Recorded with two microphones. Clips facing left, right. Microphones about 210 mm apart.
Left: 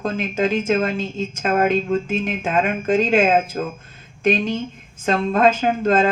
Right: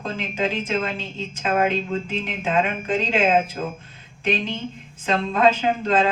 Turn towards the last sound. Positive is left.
turn(degrees=45)  # may be behind; listen again after turning